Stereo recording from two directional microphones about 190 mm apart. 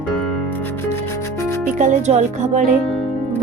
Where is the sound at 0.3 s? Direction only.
10° left (ahead or behind).